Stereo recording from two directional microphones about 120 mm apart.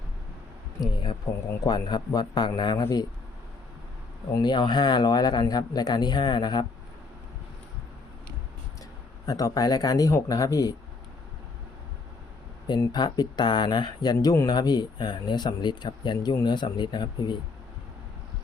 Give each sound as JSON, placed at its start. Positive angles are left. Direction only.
{"t": 0.8, "sound": "speech", "side_deg": 40}
{"t": 4.4, "sound": "speech", "side_deg": 35}
{"t": 9.2, "sound": "speech", "side_deg": 30}
{"t": 12.6, "sound": "speech", "side_deg": 35}